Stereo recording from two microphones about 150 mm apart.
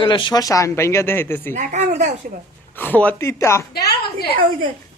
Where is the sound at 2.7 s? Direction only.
10° left (ahead or behind).